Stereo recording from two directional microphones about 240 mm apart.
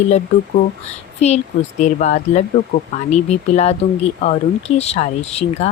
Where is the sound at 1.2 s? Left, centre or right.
Left.